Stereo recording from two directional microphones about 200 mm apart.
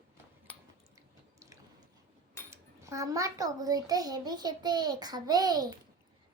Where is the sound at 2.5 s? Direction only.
15° right (ahead or behind).